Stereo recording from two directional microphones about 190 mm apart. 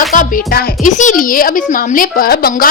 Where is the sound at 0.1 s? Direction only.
45° left (ahead or behind).